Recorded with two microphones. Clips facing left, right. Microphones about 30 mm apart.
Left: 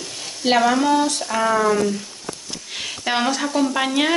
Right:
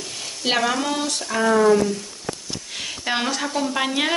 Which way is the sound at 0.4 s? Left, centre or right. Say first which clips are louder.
Left 4 dB; centre.